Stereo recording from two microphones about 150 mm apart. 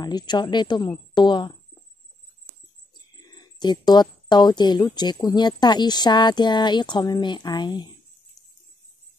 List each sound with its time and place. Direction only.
0.0 s speech: 30° left (ahead or behind)
2.9 s a sound: 25° left (ahead or behind)
4.9 s speech: 30° left (ahead or behind)